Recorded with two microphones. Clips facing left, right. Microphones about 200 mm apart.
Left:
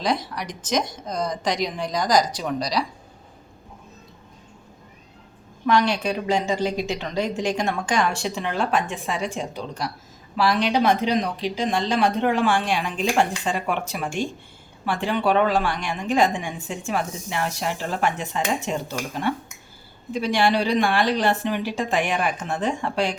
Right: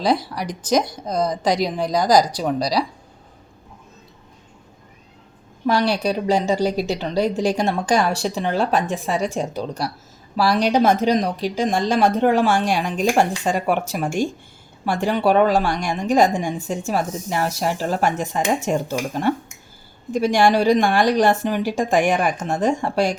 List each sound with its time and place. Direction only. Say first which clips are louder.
0.0 s a woman's voice: right 5 dB; 35° right (ahead or behind)
5.6 s a woman's voice: right 2 dB; 35° right (ahead or behind)